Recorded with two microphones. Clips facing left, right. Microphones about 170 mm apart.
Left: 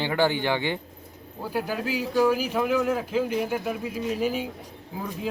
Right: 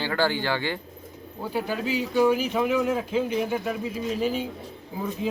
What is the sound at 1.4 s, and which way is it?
Speech, 10° left (ahead or behind).